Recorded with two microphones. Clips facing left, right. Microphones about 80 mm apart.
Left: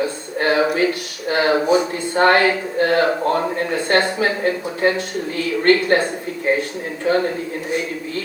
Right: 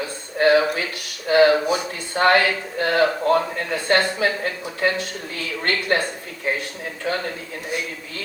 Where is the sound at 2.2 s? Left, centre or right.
Left.